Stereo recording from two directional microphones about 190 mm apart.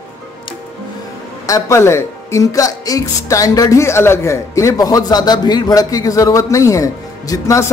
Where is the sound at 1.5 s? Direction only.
15° left (ahead or behind).